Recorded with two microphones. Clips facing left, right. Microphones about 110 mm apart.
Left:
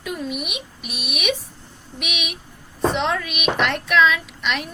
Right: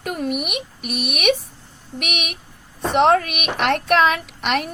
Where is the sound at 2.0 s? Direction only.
60° right (ahead or behind).